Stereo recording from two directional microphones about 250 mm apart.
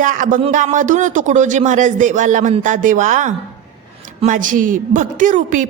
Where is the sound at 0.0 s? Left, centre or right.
Right.